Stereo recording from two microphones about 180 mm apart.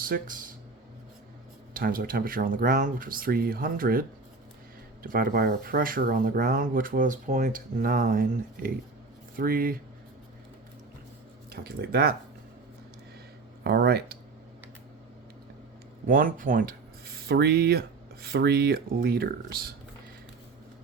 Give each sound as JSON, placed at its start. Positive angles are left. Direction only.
{"t": 0.0, "sound": "speech", "side_deg": -50}
{"t": 1.7, "sound": "speech", "side_deg": -55}
{"t": 5.0, "sound": "speech", "side_deg": -55}
{"t": 11.5, "sound": "speech", "side_deg": -60}
{"t": 13.7, "sound": "speech", "side_deg": -60}
{"t": 16.0, "sound": "speech", "side_deg": -50}
{"t": 17.2, "sound": "speech", "side_deg": -60}